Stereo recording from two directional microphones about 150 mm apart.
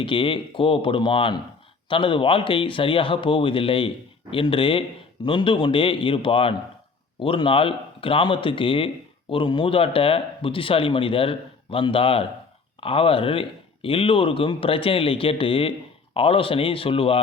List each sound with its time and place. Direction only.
0.0 s speech: 35° left (ahead or behind)